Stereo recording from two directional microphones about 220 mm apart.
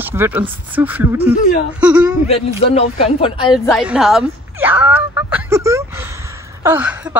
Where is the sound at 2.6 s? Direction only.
25° left (ahead or behind).